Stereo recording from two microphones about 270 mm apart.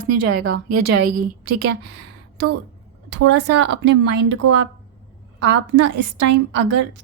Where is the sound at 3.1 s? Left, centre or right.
Right.